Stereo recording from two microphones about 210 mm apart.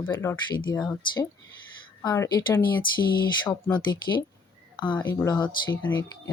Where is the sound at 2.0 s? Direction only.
15° left (ahead or behind).